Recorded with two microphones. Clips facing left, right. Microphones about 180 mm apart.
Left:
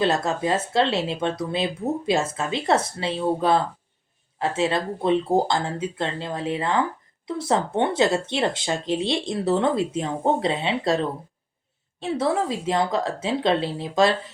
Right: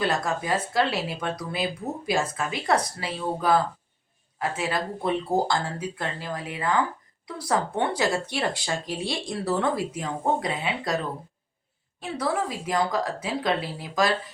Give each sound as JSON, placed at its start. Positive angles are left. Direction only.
{"t": 0.0, "sound": "speech", "side_deg": 25}